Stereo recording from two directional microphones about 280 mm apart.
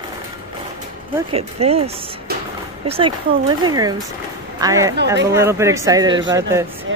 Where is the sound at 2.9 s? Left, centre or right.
Centre.